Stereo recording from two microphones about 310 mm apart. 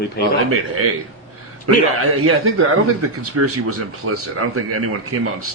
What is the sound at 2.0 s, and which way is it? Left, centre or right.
Speech, right.